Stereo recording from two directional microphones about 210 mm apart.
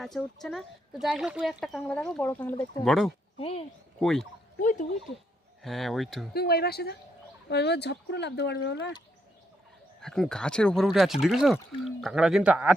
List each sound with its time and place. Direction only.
0.0 s speech: centre (ahead or behind)
3.3 s speech: 25° left (ahead or behind)
4.0 s speech: centre (ahead or behind)
4.6 s speech: 40° left (ahead or behind)
5.6 s speech: centre (ahead or behind)
6.3 s speech: 50° left (ahead or behind)
10.0 s speech: 5° left (ahead or behind)